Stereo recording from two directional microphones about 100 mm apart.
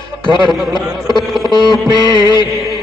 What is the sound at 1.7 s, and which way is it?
Music, 50° left (ahead or behind).